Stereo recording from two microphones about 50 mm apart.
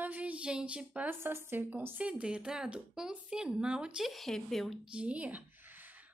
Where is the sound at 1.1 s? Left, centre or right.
Right.